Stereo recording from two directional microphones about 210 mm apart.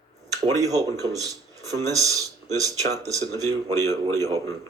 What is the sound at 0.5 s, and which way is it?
Speech, 15° right (ahead or behind).